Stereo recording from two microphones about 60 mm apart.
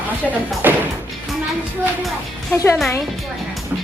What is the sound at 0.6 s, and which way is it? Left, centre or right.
Speech, right.